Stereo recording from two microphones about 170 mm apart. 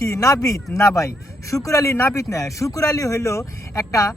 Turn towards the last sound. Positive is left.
turn(degrees=20)  # may be behind; listen again after turning